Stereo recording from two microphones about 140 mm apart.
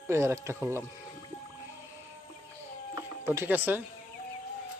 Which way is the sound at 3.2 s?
15° right (ahead or behind).